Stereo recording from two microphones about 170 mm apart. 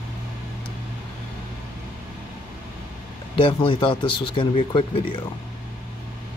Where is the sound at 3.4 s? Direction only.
30° left (ahead or behind).